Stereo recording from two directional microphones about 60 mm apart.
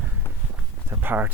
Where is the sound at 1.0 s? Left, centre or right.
Right.